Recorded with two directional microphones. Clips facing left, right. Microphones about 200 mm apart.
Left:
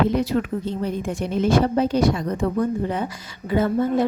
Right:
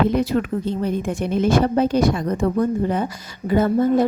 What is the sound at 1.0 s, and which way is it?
A woman's voice, 50° right (ahead or behind).